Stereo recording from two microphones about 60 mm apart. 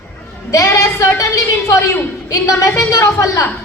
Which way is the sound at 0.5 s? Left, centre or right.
Left.